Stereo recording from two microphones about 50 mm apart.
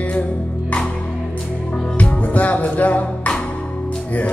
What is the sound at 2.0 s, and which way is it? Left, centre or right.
Music, left.